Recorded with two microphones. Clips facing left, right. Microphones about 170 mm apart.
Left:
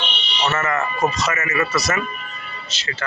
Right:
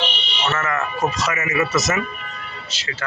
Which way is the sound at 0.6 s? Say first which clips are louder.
Left 1 dB; 5° right (ahead or behind).